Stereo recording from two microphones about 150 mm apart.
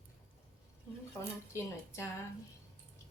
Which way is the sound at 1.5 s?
20° left (ahead or behind).